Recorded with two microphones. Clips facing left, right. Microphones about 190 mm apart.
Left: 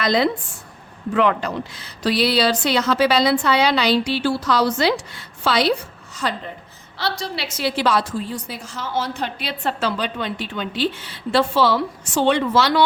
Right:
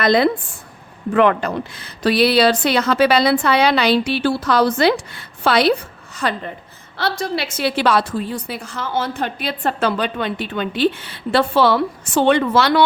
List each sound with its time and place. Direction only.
0.0 s a woman's voice: 55° right (ahead or behind)